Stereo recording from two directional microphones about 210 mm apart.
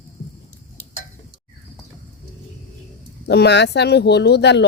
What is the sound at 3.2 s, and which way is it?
Speech, 55° left (ahead or behind).